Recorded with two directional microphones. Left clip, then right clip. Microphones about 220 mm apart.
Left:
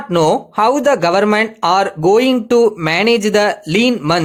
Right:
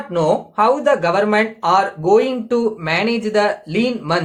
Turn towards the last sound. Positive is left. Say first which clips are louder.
# left 5 dB
turn(degrees=50)  # may be behind; listen again after turning